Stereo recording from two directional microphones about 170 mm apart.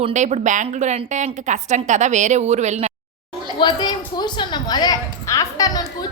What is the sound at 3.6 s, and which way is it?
A woman's voice, 25° left (ahead or behind).